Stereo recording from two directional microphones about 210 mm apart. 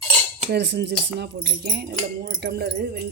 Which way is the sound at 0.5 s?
55° right (ahead or behind).